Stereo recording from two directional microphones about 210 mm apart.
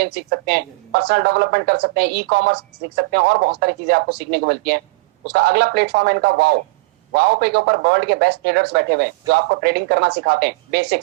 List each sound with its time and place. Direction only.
0.0 s speech: 50° right (ahead or behind)